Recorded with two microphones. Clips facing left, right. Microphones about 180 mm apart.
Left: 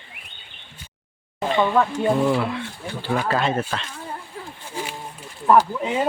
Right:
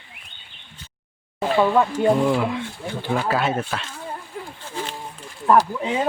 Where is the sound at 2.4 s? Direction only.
15° right (ahead or behind).